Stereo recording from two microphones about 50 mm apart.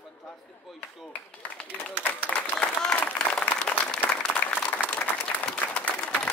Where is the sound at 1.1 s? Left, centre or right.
Left.